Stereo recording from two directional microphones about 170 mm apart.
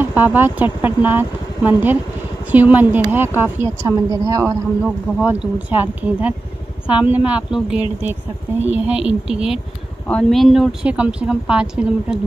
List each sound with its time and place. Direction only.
0.0 s speech: 10° right (ahead or behind)
4.8 s speech: 5° right (ahead or behind)